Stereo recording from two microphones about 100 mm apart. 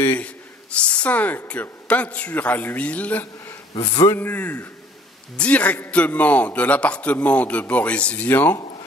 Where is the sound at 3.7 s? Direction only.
50° left (ahead or behind).